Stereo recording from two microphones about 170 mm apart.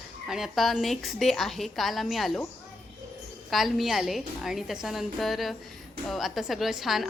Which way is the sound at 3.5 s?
Centre (ahead or behind).